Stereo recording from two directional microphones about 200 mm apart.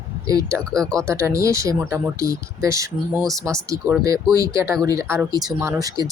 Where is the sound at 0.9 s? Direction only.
15° right (ahead or behind).